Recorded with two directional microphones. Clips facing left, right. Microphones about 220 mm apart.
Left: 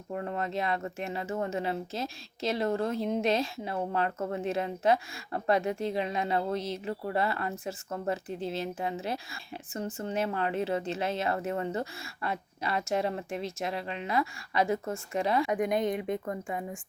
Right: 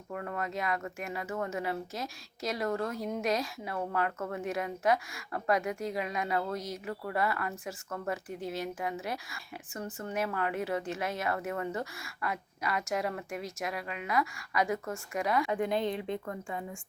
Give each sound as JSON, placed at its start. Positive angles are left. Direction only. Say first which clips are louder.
{"t": 0.1, "sound": "speech", "louder": "left 3 dB", "side_deg": 25}
{"t": 15.5, "sound": "a woman's voice", "louder": "left 2 dB", "side_deg": 15}